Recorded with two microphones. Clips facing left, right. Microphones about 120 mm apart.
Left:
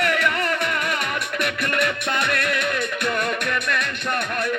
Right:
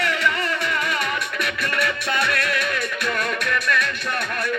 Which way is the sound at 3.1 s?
25° left (ahead or behind).